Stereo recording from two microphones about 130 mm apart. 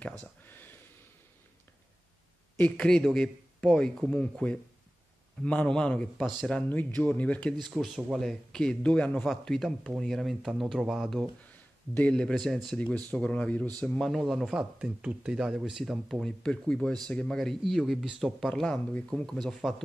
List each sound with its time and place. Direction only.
0.5 s a sound: 15° left (ahead or behind)
2.5 s speech: 10° left (ahead or behind)
6.7 s speech: 15° left (ahead or behind)
7.6 s speech: centre (ahead or behind)
11.9 s speech: 10° left (ahead or behind)